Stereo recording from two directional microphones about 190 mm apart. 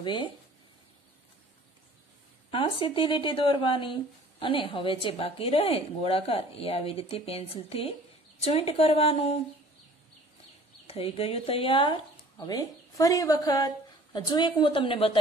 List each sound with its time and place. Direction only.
0.0 s speech: 25° left (ahead or behind)
2.5 s a woman's voice: 30° left (ahead or behind)
10.9 s speech: 30° left (ahead or behind)